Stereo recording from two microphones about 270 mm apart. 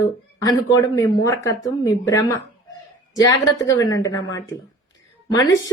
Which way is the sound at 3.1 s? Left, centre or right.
Centre.